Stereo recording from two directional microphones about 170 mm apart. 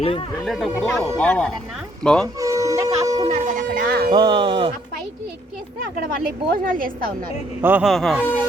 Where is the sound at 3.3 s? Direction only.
50° right (ahead or behind).